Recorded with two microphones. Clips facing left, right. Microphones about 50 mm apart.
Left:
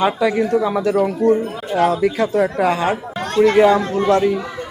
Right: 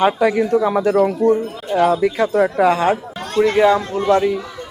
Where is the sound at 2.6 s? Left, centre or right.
Right.